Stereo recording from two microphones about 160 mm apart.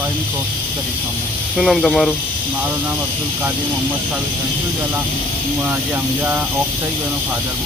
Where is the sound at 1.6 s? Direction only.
Centre (ahead or behind).